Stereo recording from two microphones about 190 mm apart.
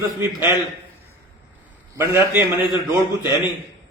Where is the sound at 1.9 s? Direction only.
15° right (ahead or behind).